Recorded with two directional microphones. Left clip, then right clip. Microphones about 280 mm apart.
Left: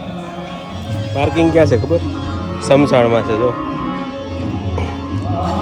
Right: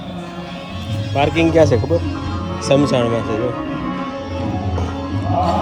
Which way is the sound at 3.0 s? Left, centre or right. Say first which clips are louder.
Left 5 dB; centre.